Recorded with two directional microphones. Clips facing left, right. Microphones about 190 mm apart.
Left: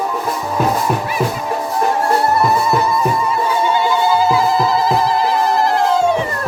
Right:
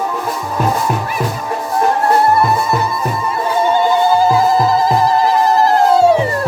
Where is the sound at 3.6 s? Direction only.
45° right (ahead or behind).